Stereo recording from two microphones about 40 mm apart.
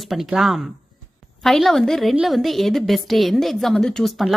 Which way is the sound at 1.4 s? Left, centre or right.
Centre.